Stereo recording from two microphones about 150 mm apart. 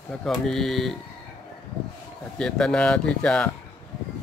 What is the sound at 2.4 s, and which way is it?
Speech, 5° left (ahead or behind).